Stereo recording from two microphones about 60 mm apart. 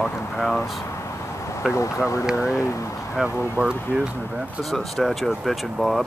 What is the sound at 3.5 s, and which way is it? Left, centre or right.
Speech, right.